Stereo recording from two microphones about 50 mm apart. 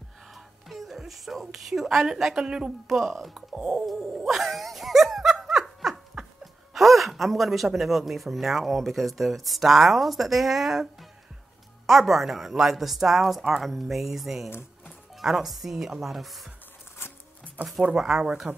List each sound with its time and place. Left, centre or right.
0.3 s whispering: centre
2.0 s a woman's voice: centre
3.0 s speech: centre
3.3 s a woman's voice: centre
3.8 s dog: centre
6.4 s speech: centre
17.0 s music: left
17.9 s a woman's voice: centre